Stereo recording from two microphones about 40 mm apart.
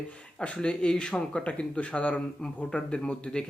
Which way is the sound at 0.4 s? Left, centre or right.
Left.